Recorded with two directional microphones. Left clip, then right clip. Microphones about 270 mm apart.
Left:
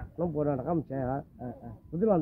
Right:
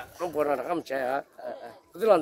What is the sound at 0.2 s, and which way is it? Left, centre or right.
Speech, right.